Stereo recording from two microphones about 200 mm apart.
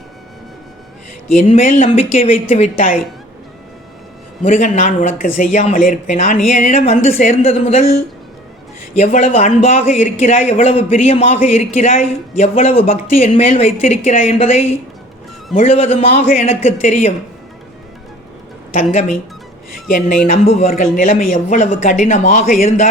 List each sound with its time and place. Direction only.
1.4 s a man's voice: 35° left (ahead or behind)
4.4 s a man's voice: 35° left (ahead or behind)
9.0 s a man's voice: 35° left (ahead or behind)
18.7 s a man's voice: 35° left (ahead or behind)
20.2 s a man's voice: 30° left (ahead or behind)